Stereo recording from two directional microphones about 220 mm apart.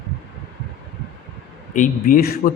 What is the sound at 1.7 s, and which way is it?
Speech, 40° left (ahead or behind).